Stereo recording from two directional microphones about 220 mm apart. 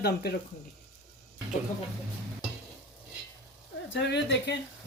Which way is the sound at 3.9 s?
50° left (ahead or behind).